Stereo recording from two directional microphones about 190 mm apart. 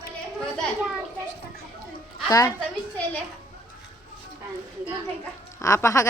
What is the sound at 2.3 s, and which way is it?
Speech, 15° left (ahead or behind).